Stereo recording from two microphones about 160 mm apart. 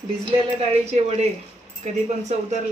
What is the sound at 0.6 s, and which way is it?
Speech, 40° right (ahead or behind).